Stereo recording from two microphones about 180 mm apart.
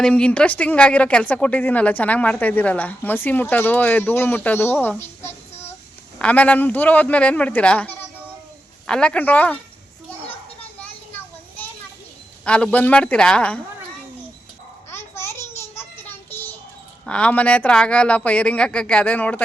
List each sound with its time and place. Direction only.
0.0 s speech: 5° left (ahead or behind)
12.5 s speech: 5° left (ahead or behind)
14.8 s a sound: 15° left (ahead or behind)
17.1 s speech: 5° left (ahead or behind)